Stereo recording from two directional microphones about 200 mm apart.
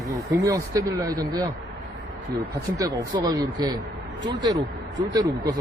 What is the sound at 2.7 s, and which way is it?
Speech, 15° right (ahead or behind).